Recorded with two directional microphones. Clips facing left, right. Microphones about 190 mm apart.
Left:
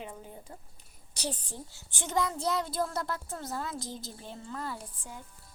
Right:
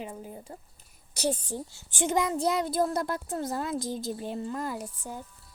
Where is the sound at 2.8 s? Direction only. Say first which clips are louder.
Right 8 dB; 35° right (ahead or behind).